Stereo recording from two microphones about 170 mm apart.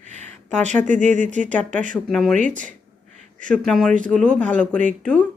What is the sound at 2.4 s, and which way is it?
Speech, 50° right (ahead or behind).